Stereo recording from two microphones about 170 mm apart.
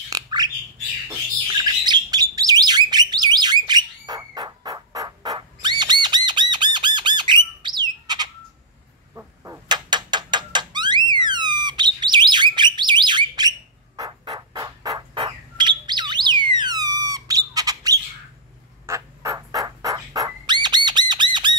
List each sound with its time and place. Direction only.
0.1 s bird: 25° right (ahead or behind)
9.1 s a sound: 15° right (ahead or behind)
18.9 s bird: 20° right (ahead or behind)